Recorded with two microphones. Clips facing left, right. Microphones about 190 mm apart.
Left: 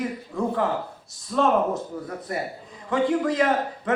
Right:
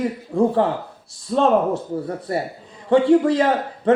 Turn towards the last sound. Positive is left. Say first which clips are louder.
# right 6 dB
turn(degrees=-30)  # may be behind; listen again after turning